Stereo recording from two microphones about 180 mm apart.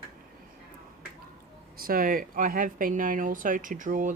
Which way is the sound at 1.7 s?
55° right (ahead or behind).